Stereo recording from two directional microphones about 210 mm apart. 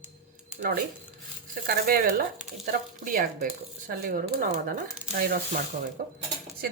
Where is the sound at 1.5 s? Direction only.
45° right (ahead or behind).